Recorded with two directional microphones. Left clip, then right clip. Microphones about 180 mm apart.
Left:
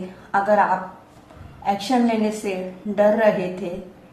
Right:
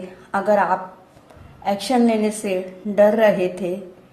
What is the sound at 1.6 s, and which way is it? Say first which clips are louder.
A woman's voice: right 2 dB; 50° right (ahead or behind).